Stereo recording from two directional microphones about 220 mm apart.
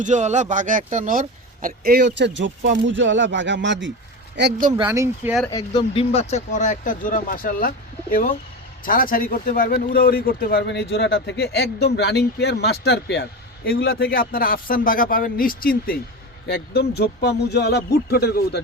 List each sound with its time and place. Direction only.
0.0 s speech: 35° right (ahead or behind); by 4.7 s 50° right (ahead or behind)
4.8 s speech: 15° right (ahead or behind)
5.5 s speech: 20° left (ahead or behind); by 7.7 s 40° left (ahead or behind)
8.8 s speech: 40° left (ahead or behind)